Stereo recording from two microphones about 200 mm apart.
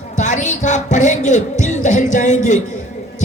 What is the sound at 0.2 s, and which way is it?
Speech, 35° left (ahead or behind).